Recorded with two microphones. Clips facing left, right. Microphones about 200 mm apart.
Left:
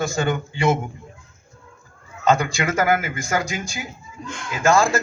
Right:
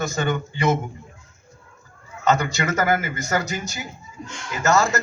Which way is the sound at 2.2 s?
10° left (ahead or behind).